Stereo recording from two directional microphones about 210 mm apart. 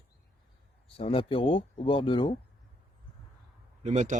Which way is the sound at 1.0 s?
25° left (ahead or behind).